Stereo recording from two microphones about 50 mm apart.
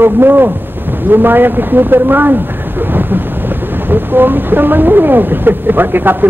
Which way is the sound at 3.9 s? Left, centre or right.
Right.